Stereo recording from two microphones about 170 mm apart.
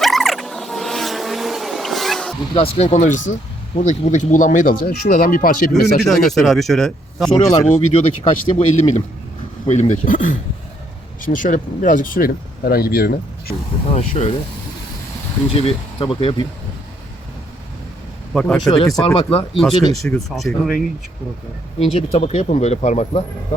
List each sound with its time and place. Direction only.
0.0 s vehicle: centre (ahead or behind)
2.6 s speech: 40° left (ahead or behind); by 5.6 s 55° left (ahead or behind)
6.0 s speech: centre (ahead or behind)
7.3 s speech: 40° left (ahead or behind); by 13.6 s 65° left (ahead or behind)
13.9 s speech: 40° left (ahead or behind)
15.5 s speech: 35° left (ahead or behind)
18.3 s speech: 5° left (ahead or behind)
18.7 s speech: 25° left (ahead or behind)
20.1 s speech: centre (ahead or behind)
21.8 s speech: 40° left (ahead or behind)